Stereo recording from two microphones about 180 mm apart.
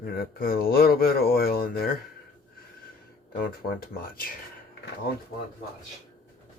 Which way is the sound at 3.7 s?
55° left (ahead or behind).